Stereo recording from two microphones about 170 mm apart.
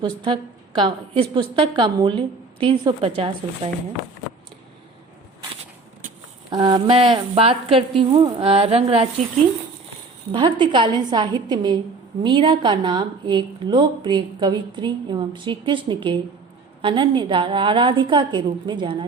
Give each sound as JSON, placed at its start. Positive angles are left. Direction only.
{"t": 0.0, "sound": "speech", "side_deg": -30}
{"t": 6.5, "sound": "speech", "side_deg": -25}
{"t": 10.3, "sound": "speech", "side_deg": -30}